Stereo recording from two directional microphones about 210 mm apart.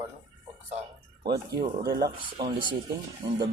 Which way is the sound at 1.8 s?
50° right (ahead or behind).